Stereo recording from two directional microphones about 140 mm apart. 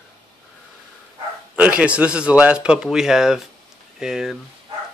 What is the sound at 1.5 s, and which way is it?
A man's voice, 10° right (ahead or behind).